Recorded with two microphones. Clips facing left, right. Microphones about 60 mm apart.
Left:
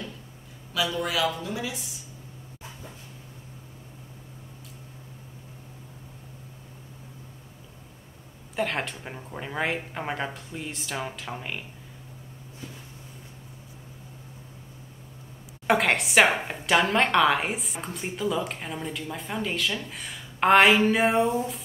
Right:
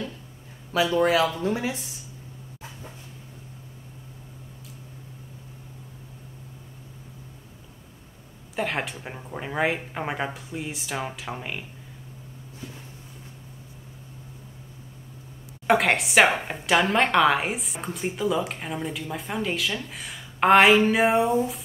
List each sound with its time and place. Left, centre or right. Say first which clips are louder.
0.7 s speech: right 6 dB; right
8.5 s speech: even; centre
15.6 s a woman's voice: right 2 dB; centre